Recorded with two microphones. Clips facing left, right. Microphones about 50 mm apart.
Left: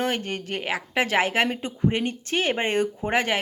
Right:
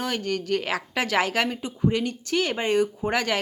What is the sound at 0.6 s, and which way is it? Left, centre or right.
A woman's voice, left.